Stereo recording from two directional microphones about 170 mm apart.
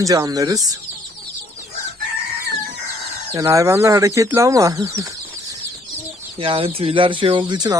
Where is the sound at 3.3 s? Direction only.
20° right (ahead or behind).